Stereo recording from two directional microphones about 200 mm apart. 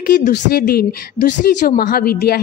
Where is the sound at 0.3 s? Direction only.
50° left (ahead or behind).